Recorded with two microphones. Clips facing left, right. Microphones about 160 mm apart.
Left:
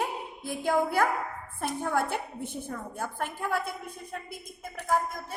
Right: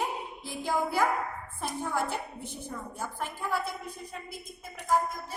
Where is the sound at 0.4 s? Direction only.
55° left (ahead or behind).